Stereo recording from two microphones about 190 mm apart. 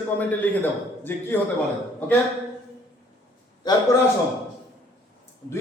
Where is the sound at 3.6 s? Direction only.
20° left (ahead or behind).